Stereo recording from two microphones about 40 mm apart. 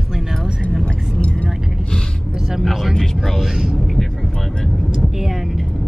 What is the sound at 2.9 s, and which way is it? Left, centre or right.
Speech, centre.